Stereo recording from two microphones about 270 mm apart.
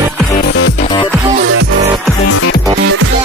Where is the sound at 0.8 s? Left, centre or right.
Centre.